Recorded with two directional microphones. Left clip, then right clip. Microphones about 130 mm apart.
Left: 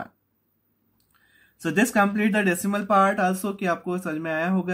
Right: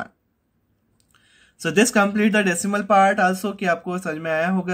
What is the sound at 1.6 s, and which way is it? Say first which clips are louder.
Speech: right 3 dB; 35° right (ahead or behind).